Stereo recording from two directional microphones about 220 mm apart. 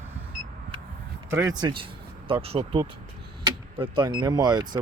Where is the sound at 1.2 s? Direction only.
15° right (ahead or behind).